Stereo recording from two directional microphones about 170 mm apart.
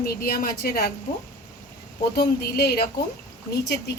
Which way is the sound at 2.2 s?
65° left (ahead or behind).